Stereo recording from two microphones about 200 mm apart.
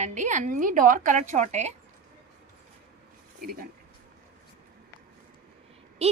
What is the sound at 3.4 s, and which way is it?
Speech, 45° right (ahead or behind).